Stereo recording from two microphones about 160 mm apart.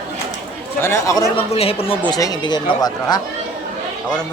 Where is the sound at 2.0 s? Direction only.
25° left (ahead or behind).